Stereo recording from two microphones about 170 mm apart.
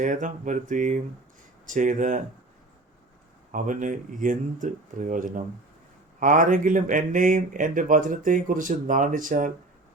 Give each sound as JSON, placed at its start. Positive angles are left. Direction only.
{"t": 0.0, "sound": "speech", "side_deg": -50}
{"t": 3.5, "sound": "speech", "side_deg": -50}